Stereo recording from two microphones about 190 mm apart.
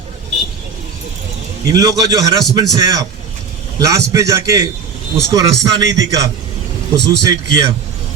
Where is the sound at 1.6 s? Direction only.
20° right (ahead or behind).